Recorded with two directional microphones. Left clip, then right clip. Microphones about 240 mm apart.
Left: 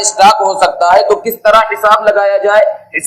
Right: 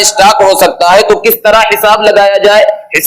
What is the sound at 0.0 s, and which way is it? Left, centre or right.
A man's voice, right.